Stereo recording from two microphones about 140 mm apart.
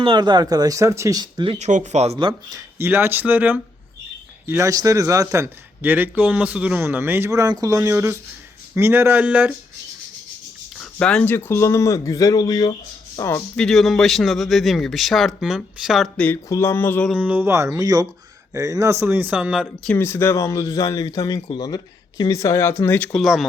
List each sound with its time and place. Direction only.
0.0 s a man's voice: 35° right (ahead or behind)
1.5 s speech: 55° right (ahead or behind)
2.1 s a man's voice: 30° right (ahead or behind); by 9.6 s 10° right (ahead or behind)
10.8 s speech: 5° left (ahead or behind)
13.6 s speech: centre (ahead or behind)
16.1 s a sound: 10° left (ahead or behind)
17.1 s a man's voice: 10° right (ahead or behind)
20.0 s speech: 15° left (ahead or behind)
23.1 s speech: centre (ahead or behind)